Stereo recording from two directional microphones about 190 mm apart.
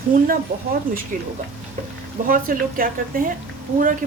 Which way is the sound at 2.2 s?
45° right (ahead or behind).